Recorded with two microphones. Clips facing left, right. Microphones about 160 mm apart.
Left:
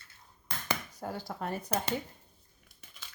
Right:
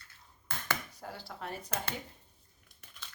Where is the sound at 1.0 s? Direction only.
45° left (ahead or behind).